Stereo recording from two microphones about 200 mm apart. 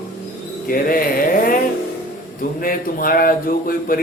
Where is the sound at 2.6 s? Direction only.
45° left (ahead or behind).